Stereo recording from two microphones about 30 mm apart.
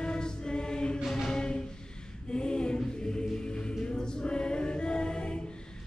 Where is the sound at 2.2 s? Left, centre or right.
Left.